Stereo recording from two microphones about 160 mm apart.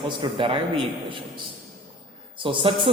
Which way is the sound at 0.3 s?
35° right (ahead or behind).